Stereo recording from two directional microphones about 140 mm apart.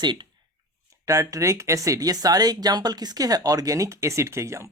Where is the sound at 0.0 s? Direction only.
30° right (ahead or behind).